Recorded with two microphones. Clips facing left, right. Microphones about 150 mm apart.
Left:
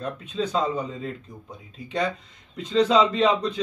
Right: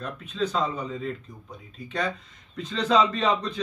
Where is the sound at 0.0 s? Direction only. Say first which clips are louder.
Left 1 dB; 25° left (ahead or behind).